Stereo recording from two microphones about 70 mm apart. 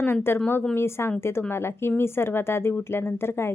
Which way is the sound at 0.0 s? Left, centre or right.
Left.